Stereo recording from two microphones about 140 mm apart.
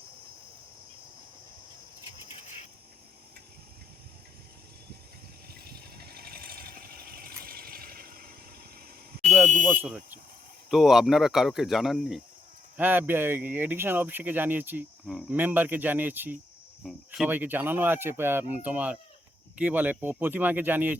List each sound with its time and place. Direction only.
5.5 s a sound: 90° right
9.2 s fire alarm: centre (ahead or behind)
10.7 s speech: centre (ahead or behind)
12.7 s speech: 15° right (ahead or behind)
16.8 s cricket: centre (ahead or behind)
17.2 s speech: 15° right (ahead or behind)